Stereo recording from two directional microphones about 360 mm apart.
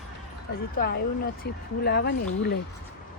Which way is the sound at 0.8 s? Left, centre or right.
Left.